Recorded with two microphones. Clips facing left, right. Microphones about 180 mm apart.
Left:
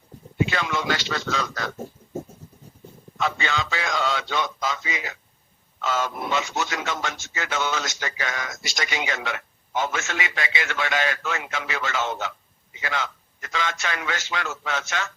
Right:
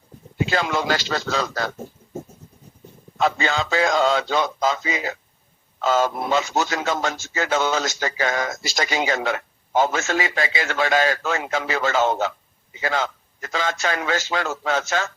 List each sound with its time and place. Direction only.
0.3 s speech: 35° right (ahead or behind)
3.2 s speech: 35° right (ahead or behind)